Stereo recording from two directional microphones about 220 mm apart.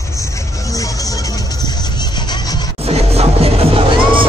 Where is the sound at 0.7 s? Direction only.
15° left (ahead or behind).